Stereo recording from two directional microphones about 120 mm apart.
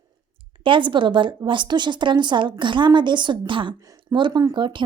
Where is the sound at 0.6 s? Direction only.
45° right (ahead or behind).